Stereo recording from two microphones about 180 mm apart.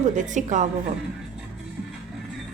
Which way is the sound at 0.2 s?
45° right (ahead or behind).